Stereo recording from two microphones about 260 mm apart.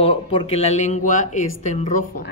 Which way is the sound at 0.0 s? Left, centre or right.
Left.